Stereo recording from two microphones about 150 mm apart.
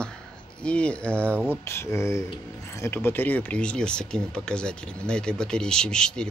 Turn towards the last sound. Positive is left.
turn(degrees=5)  # may be behind; listen again after turning